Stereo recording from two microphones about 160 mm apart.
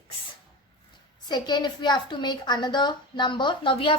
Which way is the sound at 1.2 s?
25° left (ahead or behind).